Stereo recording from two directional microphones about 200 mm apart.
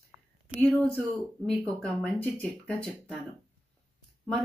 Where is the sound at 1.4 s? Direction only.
5° left (ahead or behind).